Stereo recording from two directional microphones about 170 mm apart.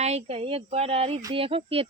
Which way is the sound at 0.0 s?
40° right (ahead or behind).